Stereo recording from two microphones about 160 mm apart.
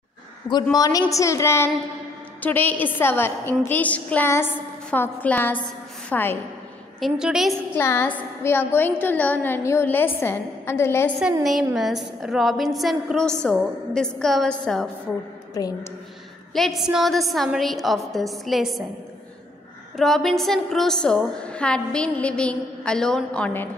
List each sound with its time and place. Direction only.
0.7 s a woman's voice: 20° left (ahead or behind)
7.0 s a woman's voice: 5° right (ahead or behind)
7.7 s a woman's voice: 15° left (ahead or behind)
11.4 s a woman's voice: centre (ahead or behind)
15.5 s a woman's voice: 25° left (ahead or behind)
16.5 s a woman's voice: centre (ahead or behind)
20.0 s a woman's voice: centre (ahead or behind)